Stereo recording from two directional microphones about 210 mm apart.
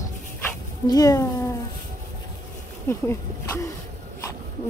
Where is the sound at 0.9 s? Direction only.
15° left (ahead or behind).